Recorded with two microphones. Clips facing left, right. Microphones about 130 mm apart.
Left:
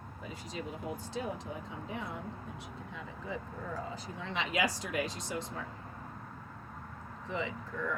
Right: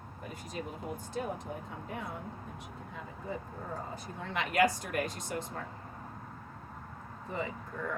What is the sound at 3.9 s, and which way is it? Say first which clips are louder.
Speech: right 1 dB; 50° right (ahead or behind).